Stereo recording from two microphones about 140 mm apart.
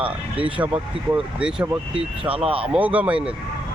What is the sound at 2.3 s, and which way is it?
Speech, 40° right (ahead or behind).